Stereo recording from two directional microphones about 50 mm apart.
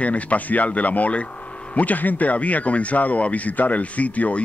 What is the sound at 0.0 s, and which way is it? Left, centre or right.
A man's voice, left.